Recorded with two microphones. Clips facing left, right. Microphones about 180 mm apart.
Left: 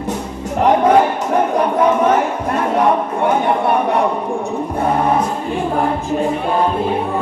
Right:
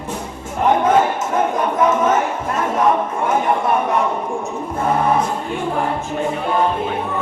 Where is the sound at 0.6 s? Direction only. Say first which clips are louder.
Left 3 dB; 35° left (ahead or behind).